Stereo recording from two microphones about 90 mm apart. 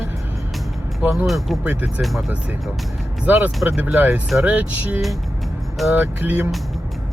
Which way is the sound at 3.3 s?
20° right (ahead or behind).